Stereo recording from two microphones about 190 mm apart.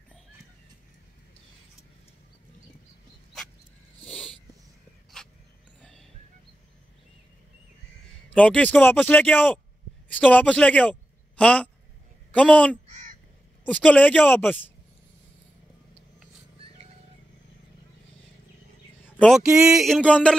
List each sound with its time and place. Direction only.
4.0 s dog: 5° left (ahead or behind)
5.2 s a sound: 5° left (ahead or behind)
8.3 s a man's voice: 5° left (ahead or behind)
12.8 s crow: 40° right (ahead or behind)
13.7 s speech: 5° left (ahead or behind)
19.1 s speech: 5° right (ahead or behind)
19.8 s a sound: 5° left (ahead or behind)